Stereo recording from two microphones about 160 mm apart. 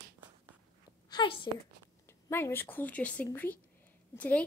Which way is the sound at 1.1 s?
30° left (ahead or behind).